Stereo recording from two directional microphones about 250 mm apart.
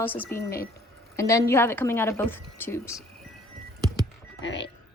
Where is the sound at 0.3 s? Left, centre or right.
Left.